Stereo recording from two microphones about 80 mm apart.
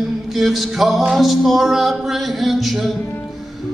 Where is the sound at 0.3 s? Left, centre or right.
Centre.